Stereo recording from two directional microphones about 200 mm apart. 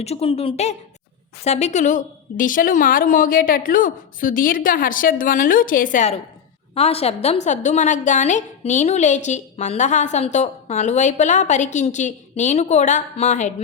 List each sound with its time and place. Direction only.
0.0 s a woman's voice: 30° left (ahead or behind)